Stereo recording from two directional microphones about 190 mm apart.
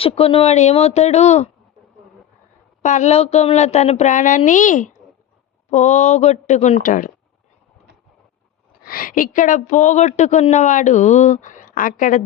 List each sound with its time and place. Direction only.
0.0 s a woman's voice: 30° left (ahead or behind)
2.8 s a woman's voice: 40° left (ahead or behind)
8.8 s a woman's voice: 50° left (ahead or behind)